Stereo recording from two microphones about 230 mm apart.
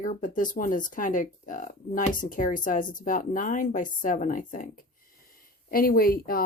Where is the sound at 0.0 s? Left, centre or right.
Left.